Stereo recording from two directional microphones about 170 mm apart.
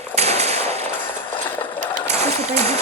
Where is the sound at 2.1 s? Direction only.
40° right (ahead or behind).